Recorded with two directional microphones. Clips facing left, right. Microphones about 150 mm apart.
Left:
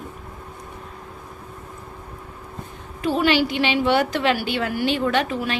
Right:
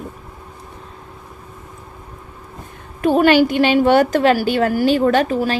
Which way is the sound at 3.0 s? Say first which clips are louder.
Right 7 dB; 50° right (ahead or behind).